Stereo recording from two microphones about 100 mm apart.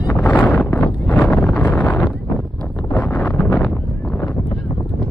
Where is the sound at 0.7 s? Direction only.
20° left (ahead or behind).